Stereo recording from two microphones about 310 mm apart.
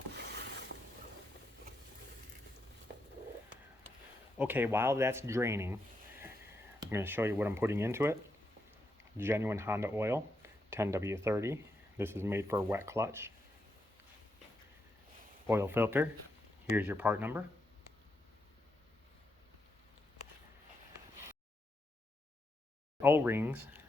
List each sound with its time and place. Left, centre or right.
0.2 s a sound: right
4.4 s speech: centre
15.4 s speech: centre
23.0 s speech: centre